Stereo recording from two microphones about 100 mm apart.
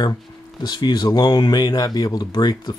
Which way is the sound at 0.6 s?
45° left (ahead or behind).